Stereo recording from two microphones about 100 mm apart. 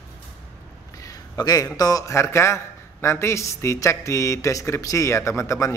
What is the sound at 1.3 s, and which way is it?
Speech, 40° left (ahead or behind).